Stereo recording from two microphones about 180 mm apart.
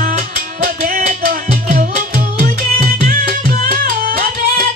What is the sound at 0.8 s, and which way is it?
Music, 50° right (ahead or behind).